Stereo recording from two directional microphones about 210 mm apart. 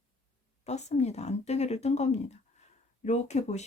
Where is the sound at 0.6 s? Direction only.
30° left (ahead or behind).